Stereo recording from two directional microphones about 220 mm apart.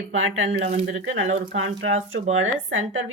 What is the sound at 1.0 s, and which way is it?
Speech, 60° right (ahead or behind).